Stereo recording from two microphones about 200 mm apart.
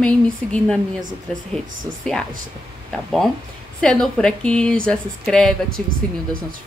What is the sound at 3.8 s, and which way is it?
Speech, 5° left (ahead or behind).